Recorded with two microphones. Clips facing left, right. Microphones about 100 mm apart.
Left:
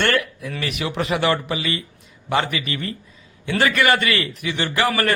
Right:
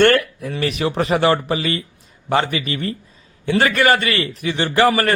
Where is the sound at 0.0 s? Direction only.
45° right (ahead or behind).